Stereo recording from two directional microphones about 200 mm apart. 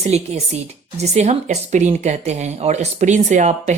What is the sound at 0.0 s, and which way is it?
Speech, 30° right (ahead or behind).